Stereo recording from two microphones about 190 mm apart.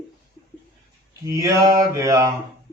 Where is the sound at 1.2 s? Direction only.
15° right (ahead or behind).